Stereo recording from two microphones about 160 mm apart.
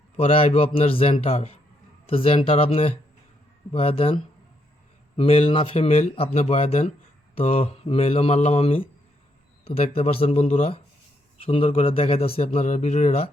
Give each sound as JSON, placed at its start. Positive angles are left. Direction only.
{"t": 0.2, "sound": "speech", "side_deg": 35}